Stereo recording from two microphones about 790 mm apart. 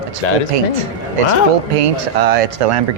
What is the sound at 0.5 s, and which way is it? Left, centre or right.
Speech, right.